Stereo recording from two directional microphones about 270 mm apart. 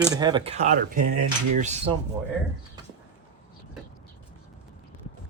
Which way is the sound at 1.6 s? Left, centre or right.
Right.